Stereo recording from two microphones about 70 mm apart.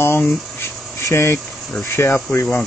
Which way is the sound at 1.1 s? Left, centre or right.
Left.